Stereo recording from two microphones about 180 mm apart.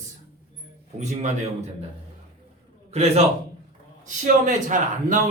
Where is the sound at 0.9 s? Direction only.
40° right (ahead or behind).